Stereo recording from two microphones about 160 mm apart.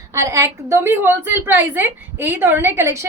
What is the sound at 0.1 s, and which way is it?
A woman's voice, 20° right (ahead or behind).